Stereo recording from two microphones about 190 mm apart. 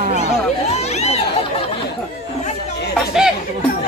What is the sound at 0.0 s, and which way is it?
Children playing, 40° right (ahead or behind).